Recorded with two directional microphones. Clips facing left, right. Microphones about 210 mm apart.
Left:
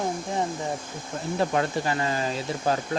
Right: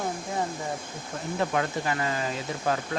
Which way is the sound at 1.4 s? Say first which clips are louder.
Left 3 dB; 30° left (ahead or behind).